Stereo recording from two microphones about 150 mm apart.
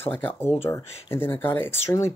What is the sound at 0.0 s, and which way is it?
Speech, 15° left (ahead or behind).